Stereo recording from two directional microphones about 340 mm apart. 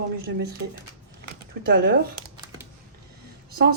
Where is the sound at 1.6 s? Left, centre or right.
Right.